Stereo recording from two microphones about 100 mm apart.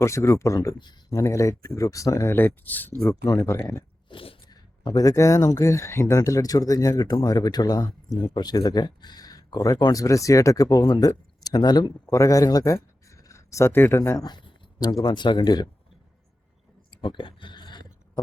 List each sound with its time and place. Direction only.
0.0 s speech: 30° left (ahead or behind)
2.3 s speech: 20° left (ahead or behind)
3.2 s speech: 35° left (ahead or behind)
4.1 s sneeze: 65° left (ahead or behind)
4.4 s a sound: 45° left (ahead or behind)
5.6 s speech: 30° left (ahead or behind); by 11.9 s 45° left (ahead or behind)
12.1 s speech: 35° left (ahead or behind)
14.2 s a sound: 45° left (ahead or behind)
15.0 s speech: 50° left (ahead or behind)
16.9 s a sound: 50° left (ahead or behind)